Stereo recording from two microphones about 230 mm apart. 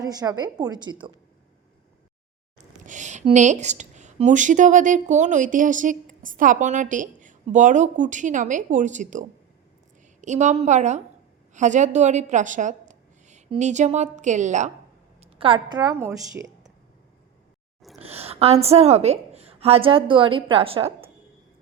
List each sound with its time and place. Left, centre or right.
0.0 s a woman's voice: centre
2.8 s a woman's voice: right; by 16.7 s centre
18.0 s a woman's voice: right